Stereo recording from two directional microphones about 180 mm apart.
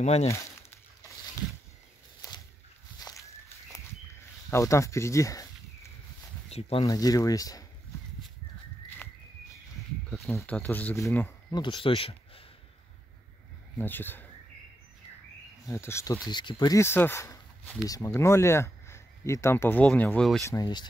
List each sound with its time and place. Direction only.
0.0 s speech: 35° left (ahead or behind)
0.3 s crumpling: 15° left (ahead or behind)
2.2 s a sound: 20° left (ahead or behind)
3.0 s walk: 20° left (ahead or behind)
4.5 s speech: 15° left (ahead or behind)
6.5 s speech: 35° left (ahead or behind)
6.9 s speech: 20° left (ahead or behind)
10.3 s speech: 10° left (ahead or behind)
11.5 s speech: 25° left (ahead or behind)
13.7 s speech: 10° left (ahead or behind)
15.6 s speech: 15° left (ahead or behind)
20.4 s speech: 20° left (ahead or behind)